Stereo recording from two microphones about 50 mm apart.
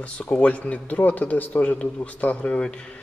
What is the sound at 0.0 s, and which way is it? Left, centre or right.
A man's voice, left.